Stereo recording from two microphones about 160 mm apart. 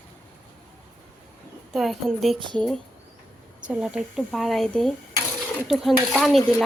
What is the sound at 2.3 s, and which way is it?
Speech, 30° right (ahead or behind).